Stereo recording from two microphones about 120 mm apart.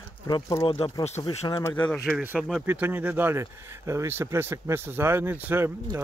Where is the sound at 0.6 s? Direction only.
55° left (ahead or behind).